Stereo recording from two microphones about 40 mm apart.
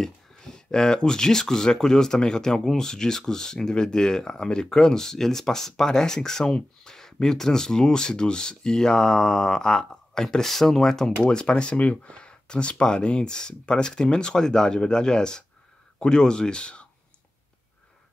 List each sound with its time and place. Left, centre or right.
0.0 s speech: centre
11.2 s speech: left
11.8 s speech: left